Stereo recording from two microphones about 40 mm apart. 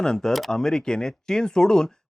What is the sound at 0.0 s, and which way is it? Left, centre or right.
Speech, centre.